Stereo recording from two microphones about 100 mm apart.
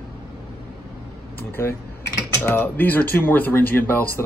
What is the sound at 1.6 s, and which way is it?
Speech, 25° left (ahead or behind).